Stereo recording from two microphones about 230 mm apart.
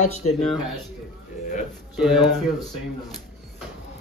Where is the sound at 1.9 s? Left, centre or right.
Centre.